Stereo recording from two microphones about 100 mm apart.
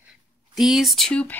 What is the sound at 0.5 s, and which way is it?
Speech, centre (ahead or behind).